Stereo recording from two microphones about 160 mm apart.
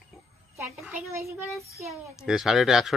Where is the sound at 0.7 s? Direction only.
5° right (ahead or behind).